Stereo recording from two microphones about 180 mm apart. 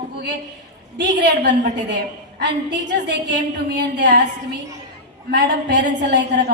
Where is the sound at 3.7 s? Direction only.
70° right (ahead or behind).